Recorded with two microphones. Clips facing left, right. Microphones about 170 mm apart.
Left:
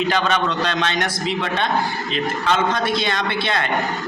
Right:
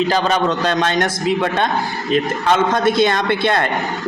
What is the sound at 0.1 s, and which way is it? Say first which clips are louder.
A woman's voice: right 3 dB; 35° right (ahead or behind).